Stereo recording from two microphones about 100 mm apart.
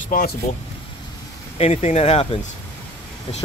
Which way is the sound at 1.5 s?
90° left.